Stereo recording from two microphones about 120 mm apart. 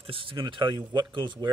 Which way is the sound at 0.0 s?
50° right (ahead or behind).